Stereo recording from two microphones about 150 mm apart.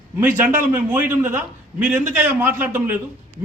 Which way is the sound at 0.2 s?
10° right (ahead or behind).